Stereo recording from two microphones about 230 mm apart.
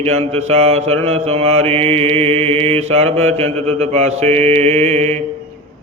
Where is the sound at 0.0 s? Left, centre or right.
Right.